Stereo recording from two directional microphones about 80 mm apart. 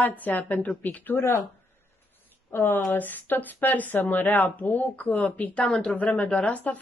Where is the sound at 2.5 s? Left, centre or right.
Left.